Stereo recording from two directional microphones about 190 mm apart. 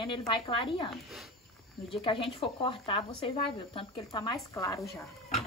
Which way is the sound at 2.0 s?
30° left (ahead or behind).